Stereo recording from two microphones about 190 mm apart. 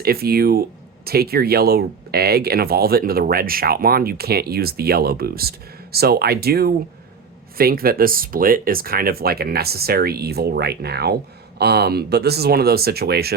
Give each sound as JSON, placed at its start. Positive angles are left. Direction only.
{"t": 0.0, "sound": "speech", "side_deg": -55}